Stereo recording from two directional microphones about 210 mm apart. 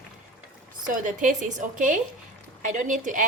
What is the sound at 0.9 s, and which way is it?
A woman's voice, 40° right (ahead or behind).